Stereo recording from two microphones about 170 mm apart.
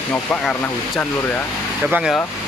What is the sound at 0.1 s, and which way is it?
Speech, 5° left (ahead or behind).